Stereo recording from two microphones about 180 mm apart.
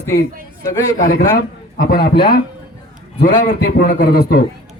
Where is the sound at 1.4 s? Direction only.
55° left (ahead or behind).